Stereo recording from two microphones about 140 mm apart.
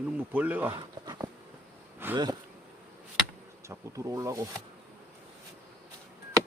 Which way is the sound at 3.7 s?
25° right (ahead or behind).